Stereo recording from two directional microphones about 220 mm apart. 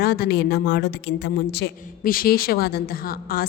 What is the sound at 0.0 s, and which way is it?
A woman's voice, 45° left (ahead or behind).